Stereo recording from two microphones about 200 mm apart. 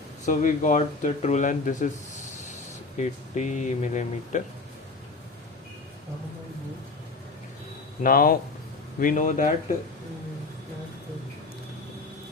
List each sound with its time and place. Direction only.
0.3 s speech: 40° left (ahead or behind)
8.0 s speech: 45° left (ahead or behind)